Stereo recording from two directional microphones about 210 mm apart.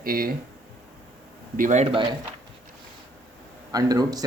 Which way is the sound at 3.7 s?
20° right (ahead or behind).